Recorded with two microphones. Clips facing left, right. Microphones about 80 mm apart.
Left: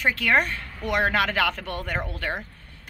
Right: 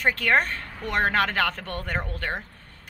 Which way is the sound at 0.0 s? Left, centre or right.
Right.